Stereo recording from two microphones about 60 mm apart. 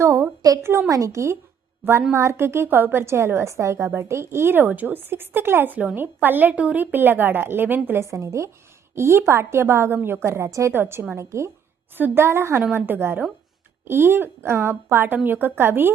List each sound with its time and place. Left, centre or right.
0.0 s a sound: right
0.6 s a woman's voice: right
0.9 s a woman's voice: right
5.7 s a woman's voice: right
8.1 s a woman's voice: right
11.1 s a woman's voice: right
11.9 s a woman's voice: right